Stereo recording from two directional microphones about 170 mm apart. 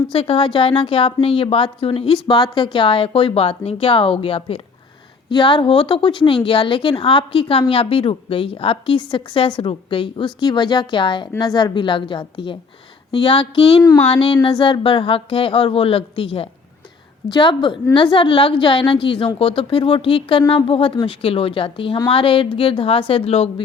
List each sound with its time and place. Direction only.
0.1 s a woman's voice: 35° left (ahead or behind)
13.8 s speech: 15° left (ahead or behind)
14.1 s a woman's voice: 30° left (ahead or behind)